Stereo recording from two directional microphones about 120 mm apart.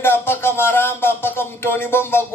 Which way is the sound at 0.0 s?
20° left (ahead or behind).